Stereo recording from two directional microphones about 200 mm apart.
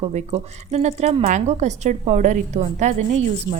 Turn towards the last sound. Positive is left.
turn(degrees=-35)  # may be behind; listen again after turning